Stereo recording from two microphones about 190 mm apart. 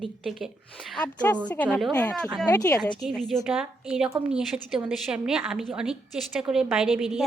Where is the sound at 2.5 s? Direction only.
20° left (ahead or behind).